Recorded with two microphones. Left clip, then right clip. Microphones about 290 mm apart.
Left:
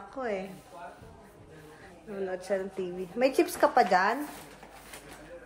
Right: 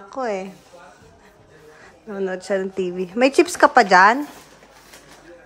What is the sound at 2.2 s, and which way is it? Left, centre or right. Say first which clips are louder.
Speech: right 9 dB; right.